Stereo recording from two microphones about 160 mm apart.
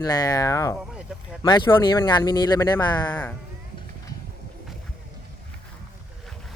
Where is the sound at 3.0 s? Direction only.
10° left (ahead or behind).